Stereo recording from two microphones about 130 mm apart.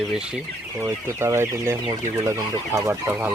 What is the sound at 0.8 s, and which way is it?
Speech, 20° right (ahead or behind).